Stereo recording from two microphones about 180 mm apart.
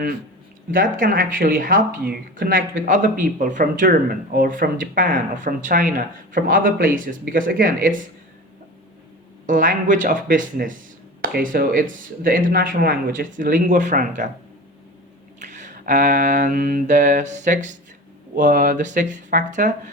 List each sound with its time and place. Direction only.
0.7 s speech: 50° right (ahead or behind)
9.5 s speech: 45° right (ahead or behind)
15.4 s a sound: 45° right (ahead or behind)
18.3 s speech: 45° right (ahead or behind)